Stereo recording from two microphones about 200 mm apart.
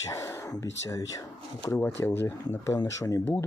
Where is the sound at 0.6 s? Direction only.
65° left (ahead or behind).